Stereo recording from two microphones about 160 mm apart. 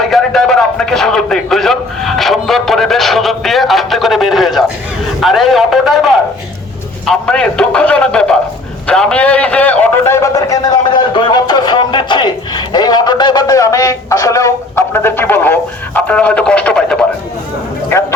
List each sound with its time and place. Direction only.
0.0 s a man's voice: centre (ahead or behind)